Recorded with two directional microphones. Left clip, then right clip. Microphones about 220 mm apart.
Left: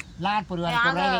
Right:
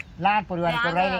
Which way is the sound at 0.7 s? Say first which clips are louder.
Left 4 dB; 20° left (ahead or behind).